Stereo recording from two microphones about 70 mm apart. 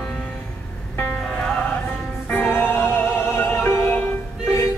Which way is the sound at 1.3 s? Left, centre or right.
Centre.